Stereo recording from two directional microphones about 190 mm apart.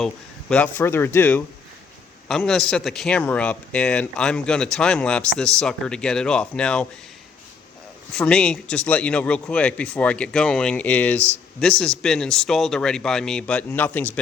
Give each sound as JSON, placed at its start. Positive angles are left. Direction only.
{"t": 0.0, "sound": "a man's voice", "side_deg": 5}
{"t": 8.1, "sound": "a man's voice", "side_deg": 5}